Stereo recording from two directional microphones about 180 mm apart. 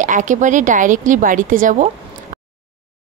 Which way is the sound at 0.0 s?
45° right (ahead or behind).